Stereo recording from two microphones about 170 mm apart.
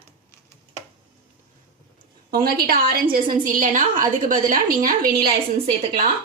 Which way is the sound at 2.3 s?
60° right (ahead or behind).